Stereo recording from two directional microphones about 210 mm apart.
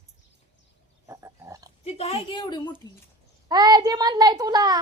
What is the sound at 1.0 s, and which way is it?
Pig, 15° right (ahead or behind).